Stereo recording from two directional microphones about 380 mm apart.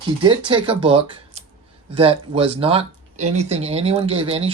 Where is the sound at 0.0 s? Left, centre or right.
Centre.